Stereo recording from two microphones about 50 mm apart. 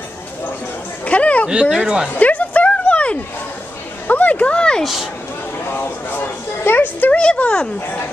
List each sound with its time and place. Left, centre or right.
1.0 s chatter: left
1.5 s speech: centre
2.1 s a sound: left
4.1 s speech: left
5.7 s speech: left
7.1 s speech: left
7.8 s speech: left